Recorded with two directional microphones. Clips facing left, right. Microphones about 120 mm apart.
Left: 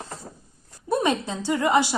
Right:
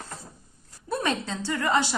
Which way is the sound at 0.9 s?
15° left (ahead or behind).